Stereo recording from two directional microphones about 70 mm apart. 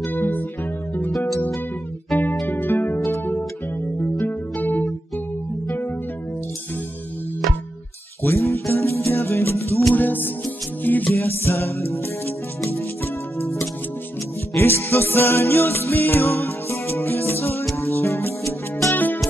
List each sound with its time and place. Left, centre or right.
0.0 s music: left
2.4 s music: left
8.2 s music: left